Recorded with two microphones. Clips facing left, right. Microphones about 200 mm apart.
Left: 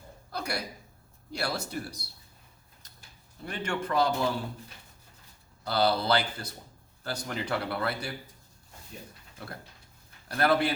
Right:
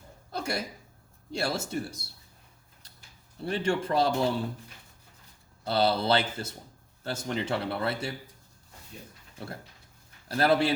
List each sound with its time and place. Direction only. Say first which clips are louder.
0.3 s a sound: right 2 dB; 25° right (ahead or behind)
1.3 s speech: right 3 dB; 25° right (ahead or behind)
3.4 s speech: right 5 dB; 30° right (ahead or behind)
5.6 s speech: right 1 dB; 25° right (ahead or behind)
10.2 s speech: right 1 dB; 25° right (ahead or behind)